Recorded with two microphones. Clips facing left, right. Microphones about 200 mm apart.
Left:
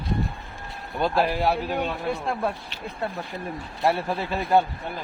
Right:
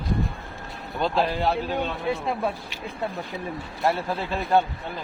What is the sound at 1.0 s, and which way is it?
Speech, 10° left (ahead or behind).